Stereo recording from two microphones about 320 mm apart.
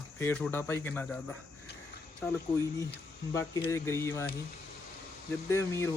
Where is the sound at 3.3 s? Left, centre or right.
Centre.